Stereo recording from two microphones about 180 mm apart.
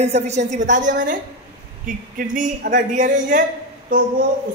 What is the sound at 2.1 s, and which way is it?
Speech, 50° right (ahead or behind).